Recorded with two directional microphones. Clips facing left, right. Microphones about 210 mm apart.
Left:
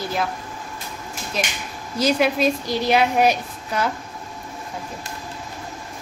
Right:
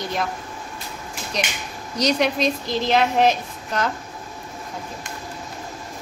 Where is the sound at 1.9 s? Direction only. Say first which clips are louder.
Left 1 dB; 5° left (ahead or behind).